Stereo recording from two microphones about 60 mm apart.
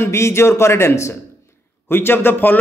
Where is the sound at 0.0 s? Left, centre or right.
Left.